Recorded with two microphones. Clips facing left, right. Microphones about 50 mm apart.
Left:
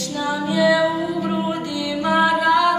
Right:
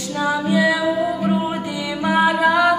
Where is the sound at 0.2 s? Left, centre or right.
Centre.